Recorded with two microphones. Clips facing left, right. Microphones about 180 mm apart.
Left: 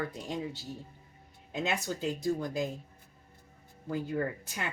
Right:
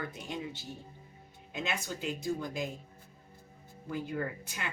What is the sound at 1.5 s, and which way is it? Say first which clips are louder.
Speech: left 4 dB; 35° left (ahead or behind).